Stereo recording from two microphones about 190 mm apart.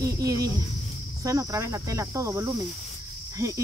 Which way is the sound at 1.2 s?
15° right (ahead or behind).